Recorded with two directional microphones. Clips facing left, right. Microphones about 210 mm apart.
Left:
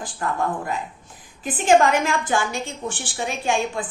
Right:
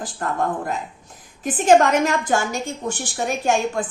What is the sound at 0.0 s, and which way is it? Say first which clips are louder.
A woman's voice: right 1 dB; 40° right (ahead or behind).